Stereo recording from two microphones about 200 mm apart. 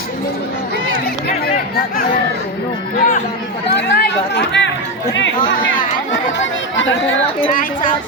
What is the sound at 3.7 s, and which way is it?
Chatter, 55° left (ahead or behind).